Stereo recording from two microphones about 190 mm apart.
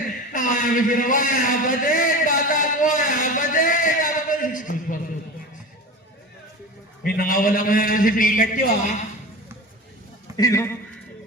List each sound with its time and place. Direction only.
0.3 s a man's voice: 45° left (ahead or behind)
7.0 s a man's voice: 50° left (ahead or behind)
10.3 s a man's voice: 15° left (ahead or behind)